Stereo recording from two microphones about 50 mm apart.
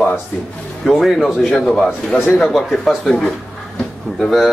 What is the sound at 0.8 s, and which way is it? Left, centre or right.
Speech, centre.